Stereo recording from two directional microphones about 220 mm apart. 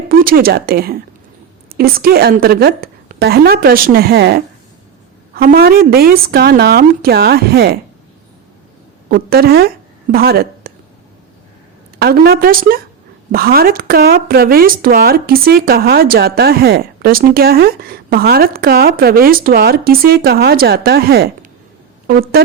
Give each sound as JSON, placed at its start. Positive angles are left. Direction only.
{"t": 0.1, "sound": "speech", "side_deg": -40}
{"t": 9.0, "sound": "speech", "side_deg": -45}
{"t": 11.9, "sound": "speech", "side_deg": -45}